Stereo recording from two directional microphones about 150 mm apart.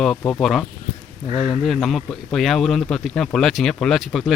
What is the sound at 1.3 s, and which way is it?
Speech, 45° left (ahead or behind).